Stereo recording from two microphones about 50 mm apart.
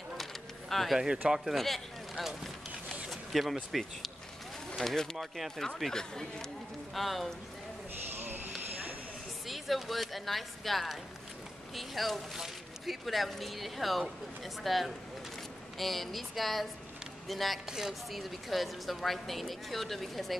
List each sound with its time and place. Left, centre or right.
0.2 s a sound: centre
0.9 s speech: centre
1.3 s a sound: centre
5.1 s speech: centre
5.8 s speech: centre
8.1 s clip-clop: right
9.5 s speech: centre
17.6 s speech: centre